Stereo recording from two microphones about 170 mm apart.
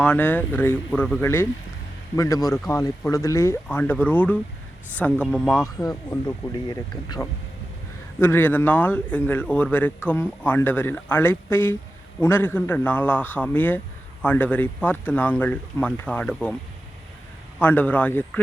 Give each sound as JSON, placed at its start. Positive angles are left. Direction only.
{"t": 0.0, "sound": "a man's voice", "side_deg": 10}
{"t": 5.6, "sound": "a man's voice", "side_deg": 20}
{"t": 17.6, "sound": "a man's voice", "side_deg": 10}